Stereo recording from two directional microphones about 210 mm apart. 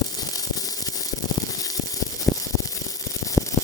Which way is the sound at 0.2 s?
15° left (ahead or behind).